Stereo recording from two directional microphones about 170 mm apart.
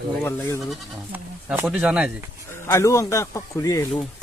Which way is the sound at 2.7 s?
20° left (ahead or behind).